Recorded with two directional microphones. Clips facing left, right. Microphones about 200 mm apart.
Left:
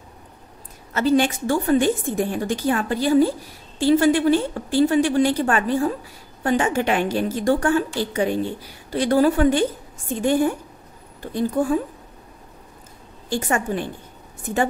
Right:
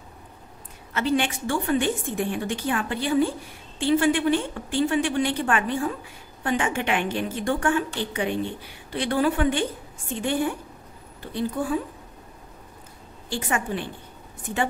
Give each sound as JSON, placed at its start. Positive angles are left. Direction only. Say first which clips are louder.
{"t": 0.9, "sound": "a woman's voice", "louder": "left 6 dB", "side_deg": 40}
{"t": 13.3, "sound": "a woman's voice", "louder": "left 4 dB", "side_deg": 45}